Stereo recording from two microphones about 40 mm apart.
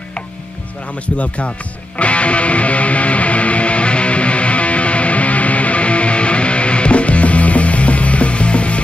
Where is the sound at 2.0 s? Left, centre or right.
Left.